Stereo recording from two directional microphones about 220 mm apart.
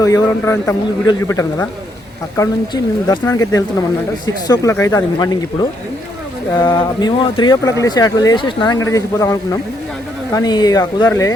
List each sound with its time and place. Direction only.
0.0 s speech: 15° left (ahead or behind)